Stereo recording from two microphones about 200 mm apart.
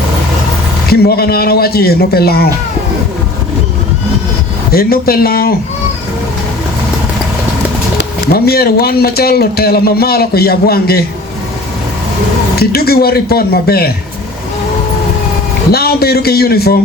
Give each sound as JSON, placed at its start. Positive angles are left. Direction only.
{"t": 0.9, "sound": "speech", "side_deg": 50}
{"t": 4.7, "sound": "speech", "side_deg": 50}
{"t": 7.9, "sound": "speech", "side_deg": 50}
{"t": 12.5, "sound": "speech", "side_deg": 50}
{"t": 15.7, "sound": "speech", "side_deg": 50}